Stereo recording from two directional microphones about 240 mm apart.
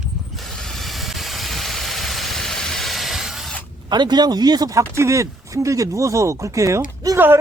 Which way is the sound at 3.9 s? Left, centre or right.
Centre.